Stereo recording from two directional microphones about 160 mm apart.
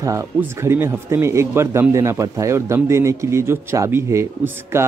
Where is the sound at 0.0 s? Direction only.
20° right (ahead or behind).